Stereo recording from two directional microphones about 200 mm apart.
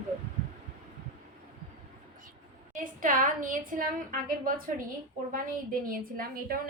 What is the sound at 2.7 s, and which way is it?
Speech, 40° right (ahead or behind).